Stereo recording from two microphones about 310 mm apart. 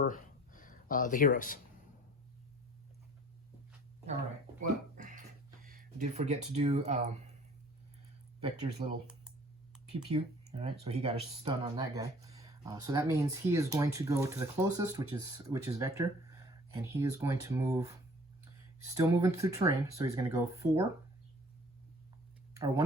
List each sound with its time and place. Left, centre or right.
0.0 s a sound: left
4.9 s music: right
5.6 s speech: right
8.4 s speech: centre
10.1 s speech: centre
22.5 s speech: centre